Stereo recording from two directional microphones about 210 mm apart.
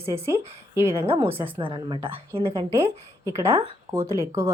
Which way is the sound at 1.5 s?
25° right (ahead or behind).